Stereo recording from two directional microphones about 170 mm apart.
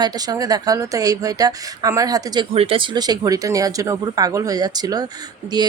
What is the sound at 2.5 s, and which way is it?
A woman's voice, 35° right (ahead or behind).